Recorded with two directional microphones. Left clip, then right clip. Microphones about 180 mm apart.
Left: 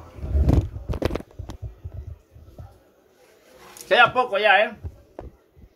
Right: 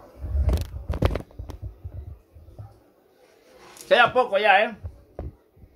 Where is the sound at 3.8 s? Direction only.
20° right (ahead or behind).